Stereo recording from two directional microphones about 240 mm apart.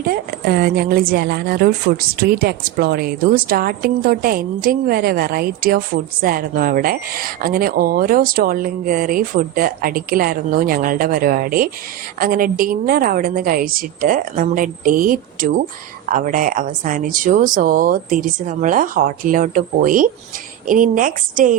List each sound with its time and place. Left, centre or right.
0.0 s a woman's voice: right